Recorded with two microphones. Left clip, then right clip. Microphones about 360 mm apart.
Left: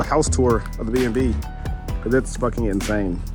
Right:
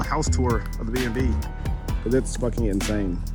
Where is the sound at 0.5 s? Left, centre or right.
Left.